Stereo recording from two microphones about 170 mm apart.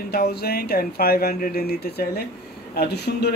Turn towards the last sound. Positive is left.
turn(degrees=75)  # may be behind; listen again after turning